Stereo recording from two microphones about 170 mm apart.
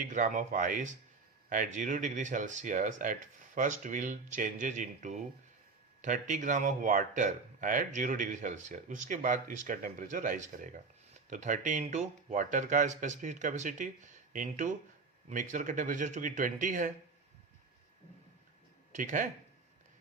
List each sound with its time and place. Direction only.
0.0 s speech: 50° right (ahead or behind)
18.9 s speech: 45° right (ahead or behind)